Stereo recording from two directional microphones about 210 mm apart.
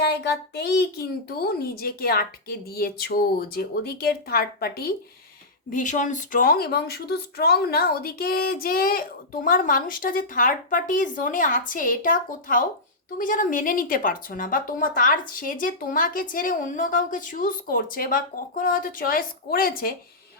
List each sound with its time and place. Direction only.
0.0 s speech: 50° left (ahead or behind)